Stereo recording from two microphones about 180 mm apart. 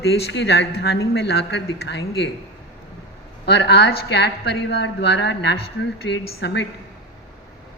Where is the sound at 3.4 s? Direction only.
70° left (ahead or behind).